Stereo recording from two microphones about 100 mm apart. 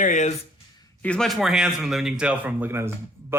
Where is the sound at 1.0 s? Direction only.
5° left (ahead or behind).